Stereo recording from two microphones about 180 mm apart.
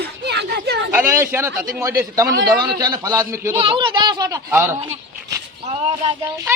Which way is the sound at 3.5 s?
30° right (ahead or behind).